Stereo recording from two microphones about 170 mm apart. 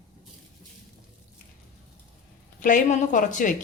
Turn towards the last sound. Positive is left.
turn(degrees=50)  # may be behind; listen again after turning